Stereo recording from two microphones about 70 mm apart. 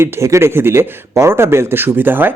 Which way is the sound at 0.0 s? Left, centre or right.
Right.